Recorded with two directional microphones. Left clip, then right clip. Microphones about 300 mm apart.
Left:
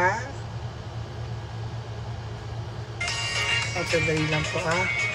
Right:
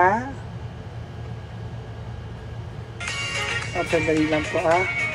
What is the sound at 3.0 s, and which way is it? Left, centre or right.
Music, right.